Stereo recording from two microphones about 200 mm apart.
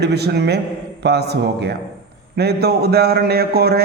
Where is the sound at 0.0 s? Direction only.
55° right (ahead or behind).